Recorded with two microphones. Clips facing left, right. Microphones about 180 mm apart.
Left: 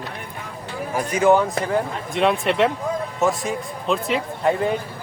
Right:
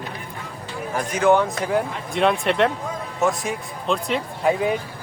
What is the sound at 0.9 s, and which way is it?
Speech, 5° left (ahead or behind).